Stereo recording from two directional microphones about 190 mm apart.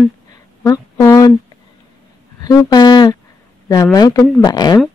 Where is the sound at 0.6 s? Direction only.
15° left (ahead or behind).